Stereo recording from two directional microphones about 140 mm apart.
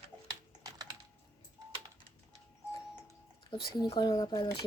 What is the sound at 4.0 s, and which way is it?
Speech, 30° left (ahead or behind).